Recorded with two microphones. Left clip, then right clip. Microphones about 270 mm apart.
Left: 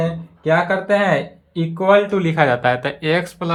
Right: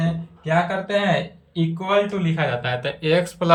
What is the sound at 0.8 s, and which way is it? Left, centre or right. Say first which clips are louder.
Speech: left 5 dB; centre.